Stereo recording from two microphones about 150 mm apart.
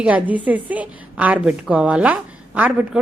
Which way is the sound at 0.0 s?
10° right (ahead or behind).